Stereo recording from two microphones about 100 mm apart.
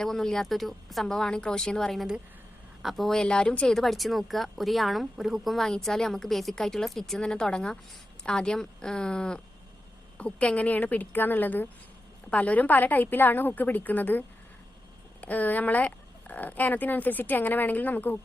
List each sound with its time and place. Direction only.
0.0 s speech: 5° left (ahead or behind)